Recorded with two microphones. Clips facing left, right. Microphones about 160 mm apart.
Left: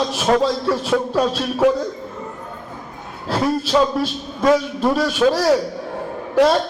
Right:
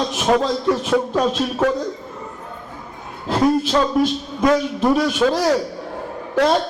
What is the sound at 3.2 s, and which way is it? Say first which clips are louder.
Music: right 3 dB; 20° right (ahead or behind).